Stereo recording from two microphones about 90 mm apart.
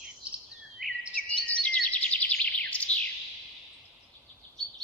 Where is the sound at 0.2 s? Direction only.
15° right (ahead or behind).